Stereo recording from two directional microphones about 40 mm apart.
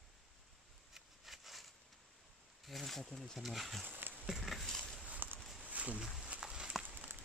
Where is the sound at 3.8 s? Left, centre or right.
Right.